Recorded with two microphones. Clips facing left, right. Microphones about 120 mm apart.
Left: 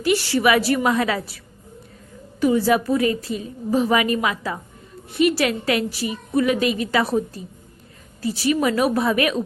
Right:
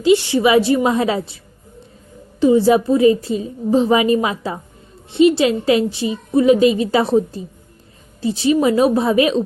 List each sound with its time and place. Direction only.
0.0 s a woman's voice: 20° right (ahead or behind)
2.4 s a woman's voice: 25° right (ahead or behind)